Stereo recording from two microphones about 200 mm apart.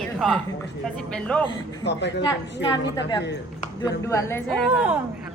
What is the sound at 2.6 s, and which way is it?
A woman's voice, 20° left (ahead or behind).